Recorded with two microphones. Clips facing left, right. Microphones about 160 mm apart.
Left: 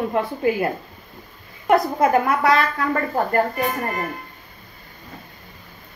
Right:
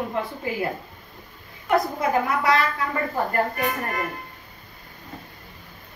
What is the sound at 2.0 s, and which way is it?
Speech, 55° left (ahead or behind).